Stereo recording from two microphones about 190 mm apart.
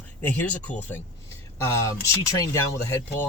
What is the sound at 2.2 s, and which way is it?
Speech, 15° left (ahead or behind).